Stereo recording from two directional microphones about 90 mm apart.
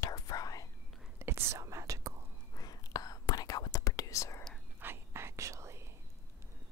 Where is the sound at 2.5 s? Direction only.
45° left (ahead or behind).